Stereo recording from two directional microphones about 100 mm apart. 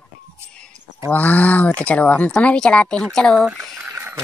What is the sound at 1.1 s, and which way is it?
Speech, 15° left (ahead or behind).